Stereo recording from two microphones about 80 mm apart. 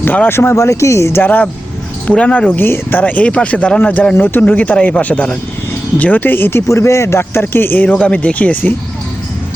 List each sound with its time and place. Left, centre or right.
0.0 s speech: left
1.2 s a man's voice: left
2.6 s speech: left
3.0 s a man's voice: centre